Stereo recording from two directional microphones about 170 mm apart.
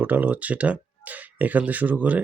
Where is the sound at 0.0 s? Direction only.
10° right (ahead or behind).